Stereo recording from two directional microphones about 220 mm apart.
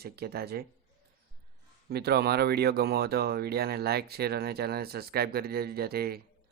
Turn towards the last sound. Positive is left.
turn(degrees=-45)  # may be behind; listen again after turning